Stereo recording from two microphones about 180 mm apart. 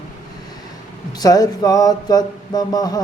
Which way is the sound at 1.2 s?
20° left (ahead or behind).